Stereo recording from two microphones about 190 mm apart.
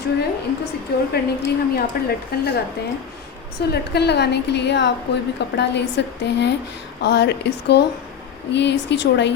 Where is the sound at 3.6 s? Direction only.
60° left (ahead or behind).